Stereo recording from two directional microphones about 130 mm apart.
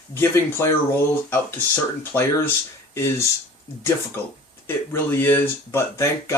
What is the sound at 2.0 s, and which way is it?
Speech, 20° left (ahead or behind).